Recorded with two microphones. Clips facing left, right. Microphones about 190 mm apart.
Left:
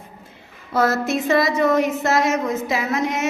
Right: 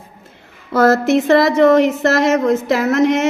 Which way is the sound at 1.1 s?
70° right (ahead or behind).